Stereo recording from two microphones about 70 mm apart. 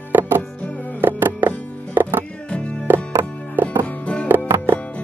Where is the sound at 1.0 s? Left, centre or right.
Right.